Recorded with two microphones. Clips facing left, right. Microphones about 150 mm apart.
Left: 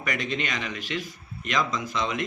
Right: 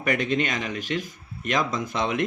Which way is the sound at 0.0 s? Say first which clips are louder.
Right 6 dB; 50° right (ahead or behind).